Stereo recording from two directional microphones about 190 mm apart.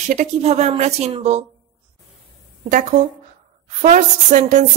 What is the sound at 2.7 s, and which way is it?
A woman's voice, 45° right (ahead or behind).